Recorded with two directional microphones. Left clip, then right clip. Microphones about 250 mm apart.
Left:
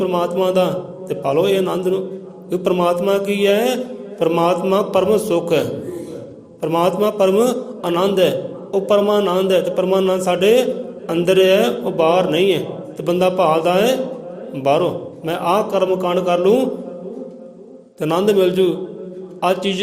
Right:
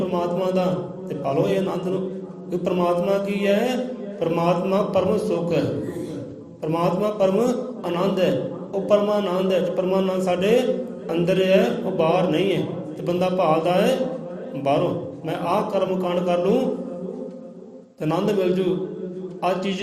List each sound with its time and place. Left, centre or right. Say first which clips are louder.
0.0 s mantra: left 6 dB; left
18.0 s mantra: left 7 dB; left